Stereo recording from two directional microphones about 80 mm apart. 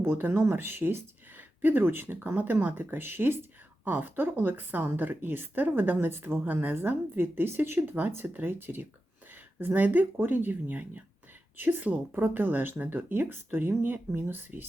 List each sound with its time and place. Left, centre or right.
0.0 s a woman's voice: right